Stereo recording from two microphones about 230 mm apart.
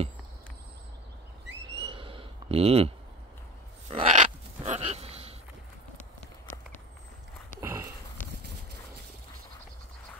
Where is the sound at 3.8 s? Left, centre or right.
Right.